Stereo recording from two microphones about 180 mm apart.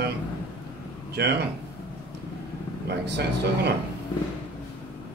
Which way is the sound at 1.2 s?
70° right (ahead or behind).